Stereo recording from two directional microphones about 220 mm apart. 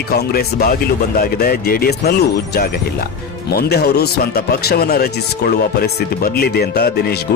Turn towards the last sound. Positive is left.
turn(degrees=45)  # may be behind; listen again after turning